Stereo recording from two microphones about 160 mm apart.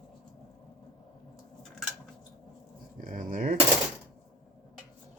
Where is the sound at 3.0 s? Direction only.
60° right (ahead or behind).